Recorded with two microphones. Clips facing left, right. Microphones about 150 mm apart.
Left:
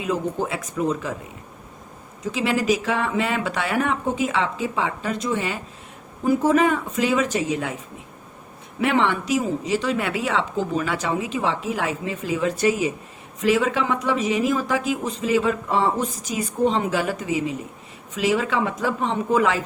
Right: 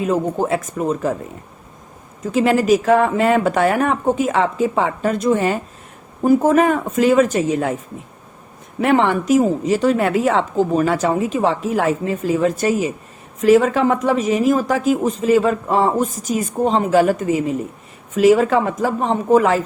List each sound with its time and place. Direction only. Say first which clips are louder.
0.0 s speech: right 6 dB; 45° right (ahead or behind)
2.2 s speech: right 6 dB; 45° right (ahead or behind)
8.8 s speech: right 5 dB; 45° right (ahead or behind)